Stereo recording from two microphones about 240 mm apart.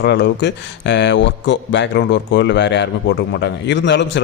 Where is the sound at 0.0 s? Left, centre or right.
Left.